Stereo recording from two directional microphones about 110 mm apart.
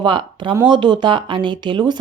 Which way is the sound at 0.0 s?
50° right (ahead or behind).